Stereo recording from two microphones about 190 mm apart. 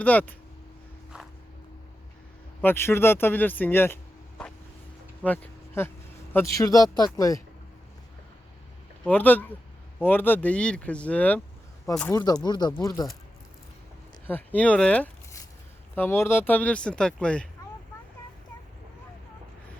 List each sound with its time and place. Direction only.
0.0 s speech: 10° left (ahead or behind)
2.6 s speech: 10° left (ahead or behind)
9.0 s speech: 10° left (ahead or behind)
14.3 s speech: 10° left (ahead or behind)